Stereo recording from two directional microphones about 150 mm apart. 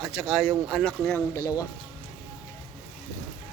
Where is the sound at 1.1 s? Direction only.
15° left (ahead or behind).